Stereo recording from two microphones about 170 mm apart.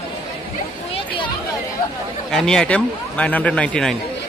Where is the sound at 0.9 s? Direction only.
30° left (ahead or behind).